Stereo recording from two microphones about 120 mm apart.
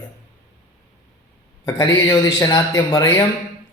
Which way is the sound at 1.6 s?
30° left (ahead or behind).